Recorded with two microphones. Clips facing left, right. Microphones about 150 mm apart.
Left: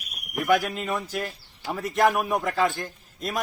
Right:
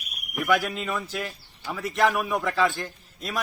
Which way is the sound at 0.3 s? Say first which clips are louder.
Left 1 dB; 45° left (ahead or behind).